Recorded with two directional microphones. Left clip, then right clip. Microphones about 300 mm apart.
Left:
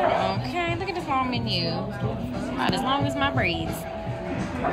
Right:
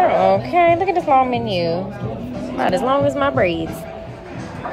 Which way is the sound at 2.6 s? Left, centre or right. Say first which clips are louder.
Right 9 dB; centre.